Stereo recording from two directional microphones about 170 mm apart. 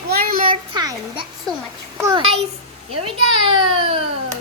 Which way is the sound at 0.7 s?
25° right (ahead or behind).